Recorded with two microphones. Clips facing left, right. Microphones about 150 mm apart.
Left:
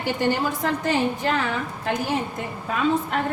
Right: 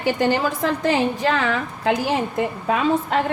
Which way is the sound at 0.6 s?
90° right.